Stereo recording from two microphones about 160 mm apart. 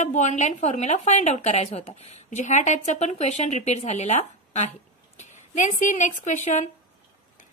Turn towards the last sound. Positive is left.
turn(degrees=50)  # may be behind; listen again after turning